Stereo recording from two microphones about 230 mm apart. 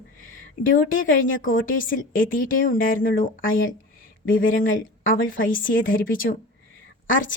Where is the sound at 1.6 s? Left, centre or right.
Left.